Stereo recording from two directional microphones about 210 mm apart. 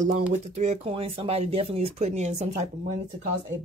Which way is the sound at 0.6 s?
30° right (ahead or behind).